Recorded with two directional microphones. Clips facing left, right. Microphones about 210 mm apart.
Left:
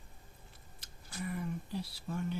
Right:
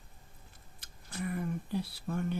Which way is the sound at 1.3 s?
55° right (ahead or behind).